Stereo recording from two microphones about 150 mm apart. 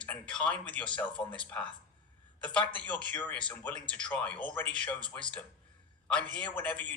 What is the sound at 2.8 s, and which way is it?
A man's voice, 10° left (ahead or behind).